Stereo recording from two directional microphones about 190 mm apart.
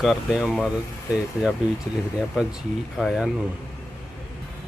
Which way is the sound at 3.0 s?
Centre (ahead or behind).